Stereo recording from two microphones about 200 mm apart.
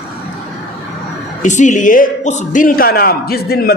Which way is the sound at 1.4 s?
35° left (ahead or behind).